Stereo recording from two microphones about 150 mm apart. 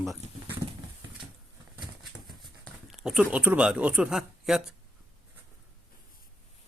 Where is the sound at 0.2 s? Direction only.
50° right (ahead or behind).